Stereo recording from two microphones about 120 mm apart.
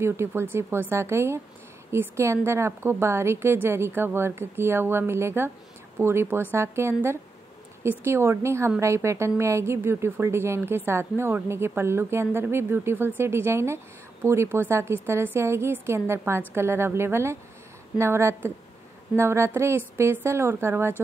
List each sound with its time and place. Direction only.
0.0 s a woman's voice: 20° right (ahead or behind)